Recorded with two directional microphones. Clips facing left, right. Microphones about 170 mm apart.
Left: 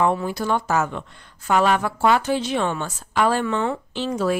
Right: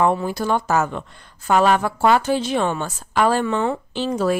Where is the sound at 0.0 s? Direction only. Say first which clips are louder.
Right 2 dB; 35° right (ahead or behind).